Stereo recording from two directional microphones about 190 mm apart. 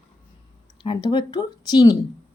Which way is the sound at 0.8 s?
25° left (ahead or behind).